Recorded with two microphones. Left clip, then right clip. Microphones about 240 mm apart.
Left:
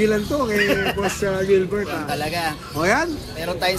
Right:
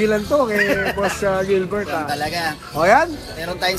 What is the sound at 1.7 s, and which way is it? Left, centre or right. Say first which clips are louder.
Speech: right 2 dB; centre.